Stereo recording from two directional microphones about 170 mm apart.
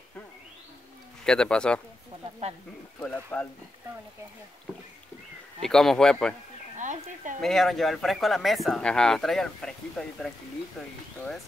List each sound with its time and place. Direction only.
1.2 s speech: 5° left (ahead or behind)
3.0 s speech: 10° left (ahead or behind)
5.6 s speech: centre (ahead or behind)
6.8 s speech: 45° right (ahead or behind)
7.4 s speech: centre (ahead or behind)